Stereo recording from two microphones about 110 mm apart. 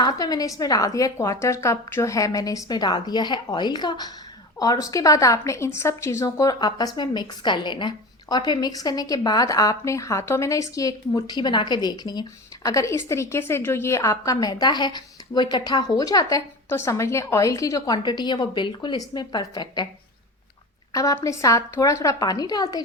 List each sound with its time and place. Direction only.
0.0 s a woman's voice: 35° left (ahead or behind)
12.6 s a woman's voice: 30° left (ahead or behind)
20.9 s a woman's voice: 30° left (ahead or behind)